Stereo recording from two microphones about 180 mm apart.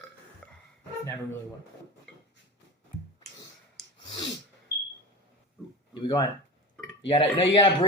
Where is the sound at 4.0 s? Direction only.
25° left (ahead or behind).